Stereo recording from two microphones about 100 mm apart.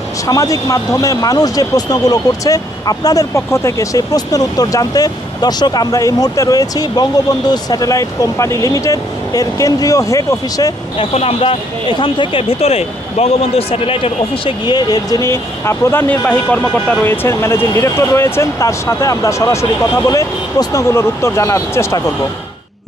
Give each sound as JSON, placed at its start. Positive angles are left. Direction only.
{"t": 0.3, "sound": "speech", "side_deg": 35}
{"t": 11.0, "sound": "speech", "side_deg": 80}
{"t": 12.0, "sound": "speech", "side_deg": 60}
{"t": 14.7, "sound": "speech", "side_deg": 45}
{"t": 17.1, "sound": "speech", "side_deg": 25}